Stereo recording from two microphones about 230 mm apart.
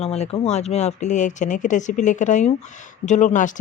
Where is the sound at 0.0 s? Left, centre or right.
Left.